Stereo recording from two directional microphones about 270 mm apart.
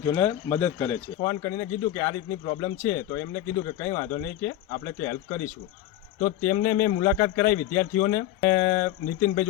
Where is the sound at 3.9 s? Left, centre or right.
Left.